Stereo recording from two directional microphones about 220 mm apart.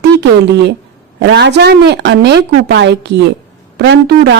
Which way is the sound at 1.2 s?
55° right (ahead or behind).